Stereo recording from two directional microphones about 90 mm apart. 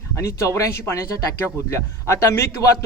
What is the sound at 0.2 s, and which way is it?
Speech, 35° left (ahead or behind).